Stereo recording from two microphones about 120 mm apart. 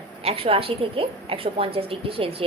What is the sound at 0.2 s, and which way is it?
A woman's voice, 50° right (ahead or behind).